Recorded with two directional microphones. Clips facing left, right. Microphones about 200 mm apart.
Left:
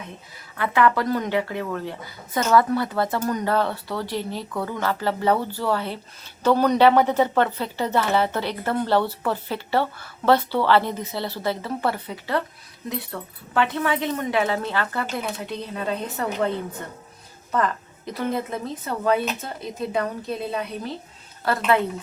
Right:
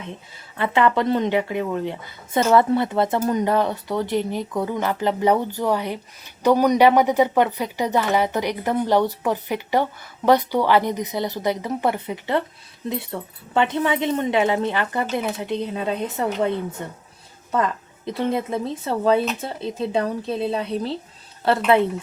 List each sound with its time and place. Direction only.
0.5 s speech: 25° right (ahead or behind)
17.5 s speech: 20° right (ahead or behind)